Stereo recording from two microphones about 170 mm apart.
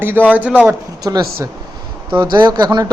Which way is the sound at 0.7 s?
20° right (ahead or behind).